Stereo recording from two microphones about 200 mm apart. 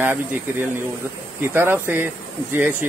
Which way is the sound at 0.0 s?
10° right (ahead or behind).